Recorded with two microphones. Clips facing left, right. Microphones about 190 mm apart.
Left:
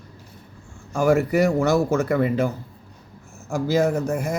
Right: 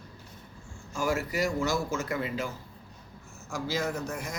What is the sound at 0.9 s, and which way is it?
A man's voice, 60° left (ahead or behind).